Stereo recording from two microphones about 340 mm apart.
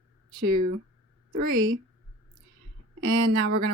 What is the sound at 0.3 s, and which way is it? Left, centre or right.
Speech, right.